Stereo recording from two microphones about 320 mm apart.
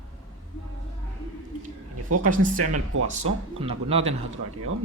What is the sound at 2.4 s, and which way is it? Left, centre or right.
Speech, right.